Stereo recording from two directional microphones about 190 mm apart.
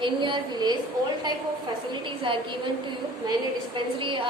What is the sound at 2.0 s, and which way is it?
Speech, 25° right (ahead or behind).